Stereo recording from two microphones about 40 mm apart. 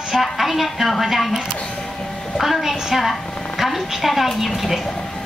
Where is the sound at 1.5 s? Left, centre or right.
Left.